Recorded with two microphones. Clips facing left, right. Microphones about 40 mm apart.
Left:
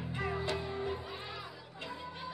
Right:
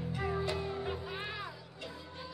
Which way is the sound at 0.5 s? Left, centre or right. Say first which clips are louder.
Right 1 dB; centre.